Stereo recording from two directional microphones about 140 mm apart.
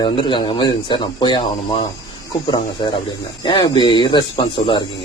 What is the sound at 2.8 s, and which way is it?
A man's voice, 35° left (ahead or behind).